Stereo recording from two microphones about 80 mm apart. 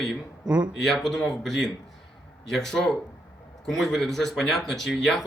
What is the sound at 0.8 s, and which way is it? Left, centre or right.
Speech, centre.